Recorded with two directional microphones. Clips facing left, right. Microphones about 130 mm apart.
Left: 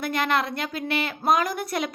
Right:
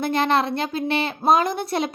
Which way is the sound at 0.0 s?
30° right (ahead or behind).